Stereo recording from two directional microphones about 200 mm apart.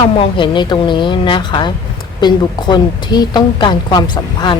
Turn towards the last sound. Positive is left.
turn(degrees=20)  # may be behind; listen again after turning